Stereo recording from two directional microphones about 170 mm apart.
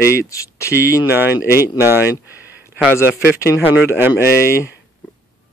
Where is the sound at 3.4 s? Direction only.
15° left (ahead or behind).